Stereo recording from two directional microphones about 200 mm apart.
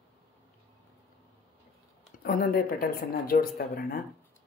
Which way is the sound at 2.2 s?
45° left (ahead or behind).